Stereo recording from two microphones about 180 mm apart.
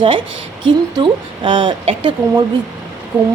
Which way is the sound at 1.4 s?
25° right (ahead or behind).